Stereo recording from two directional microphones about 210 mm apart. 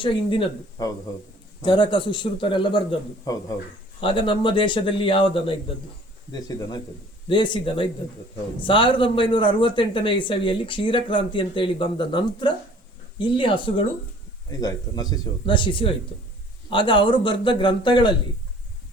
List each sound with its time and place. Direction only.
0.0 s a man's voice: 25° left (ahead or behind)